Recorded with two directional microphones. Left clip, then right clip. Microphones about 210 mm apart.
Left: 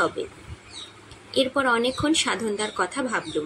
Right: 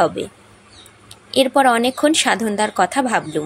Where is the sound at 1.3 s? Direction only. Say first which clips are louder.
Right 8 dB; 45° right (ahead or behind).